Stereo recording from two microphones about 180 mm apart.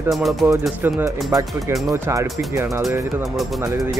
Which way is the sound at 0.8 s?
10° right (ahead or behind).